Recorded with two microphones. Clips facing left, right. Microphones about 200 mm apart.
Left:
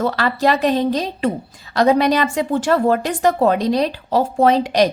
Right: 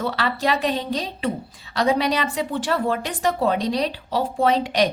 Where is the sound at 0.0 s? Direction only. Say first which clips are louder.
Left 6 dB; 45° left (ahead or behind).